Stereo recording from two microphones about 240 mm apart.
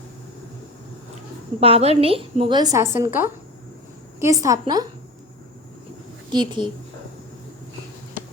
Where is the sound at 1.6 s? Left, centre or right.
Right.